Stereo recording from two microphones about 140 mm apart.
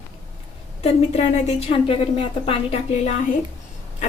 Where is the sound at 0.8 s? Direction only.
50° left (ahead or behind).